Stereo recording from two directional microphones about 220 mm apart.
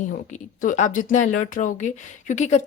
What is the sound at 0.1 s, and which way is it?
Speech, 35° left (ahead or behind).